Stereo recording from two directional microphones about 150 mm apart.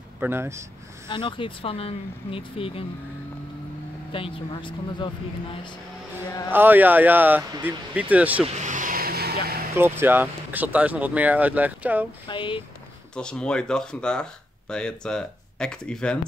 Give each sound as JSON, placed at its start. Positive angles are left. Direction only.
{"t": 0.2, "sound": "speech", "side_deg": -15}
{"t": 1.0, "sound": "speech", "side_deg": 30}
{"t": 4.1, "sound": "speech", "side_deg": 35}
{"t": 6.5, "sound": "speech", "side_deg": -15}
{"t": 8.5, "sound": "vehicle", "side_deg": -55}
{"t": 9.8, "sound": "speech", "side_deg": -15}
{"t": 12.3, "sound": "speech", "side_deg": 35}
{"t": 13.1, "sound": "speech", "side_deg": 5}